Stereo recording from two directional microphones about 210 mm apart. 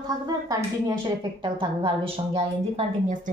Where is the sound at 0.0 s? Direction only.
15° right (ahead or behind).